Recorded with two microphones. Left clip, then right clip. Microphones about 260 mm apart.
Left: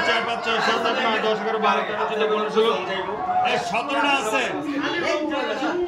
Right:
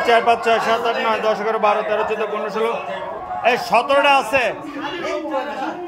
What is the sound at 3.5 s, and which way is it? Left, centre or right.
A man's voice, centre.